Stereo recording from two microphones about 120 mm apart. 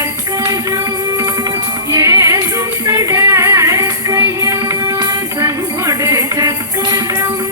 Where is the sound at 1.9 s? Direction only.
25° right (ahead or behind).